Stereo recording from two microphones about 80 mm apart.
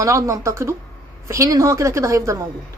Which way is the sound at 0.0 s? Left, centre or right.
Right.